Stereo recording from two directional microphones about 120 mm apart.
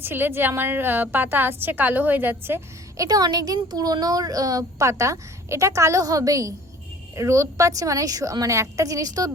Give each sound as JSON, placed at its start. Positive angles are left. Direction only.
{"t": 0.0, "sound": "a woman's voice", "side_deg": -15}
{"t": 3.0, "sound": "speech", "side_deg": -30}